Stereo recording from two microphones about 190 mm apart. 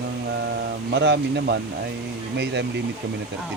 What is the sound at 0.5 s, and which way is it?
Speech, 65° right (ahead or behind).